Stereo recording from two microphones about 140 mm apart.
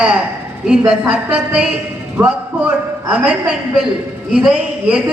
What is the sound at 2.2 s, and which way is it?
Speech, 20° right (ahead or behind).